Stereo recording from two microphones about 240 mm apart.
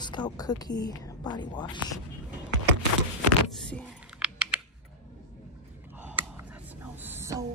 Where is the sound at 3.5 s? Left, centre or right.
Centre.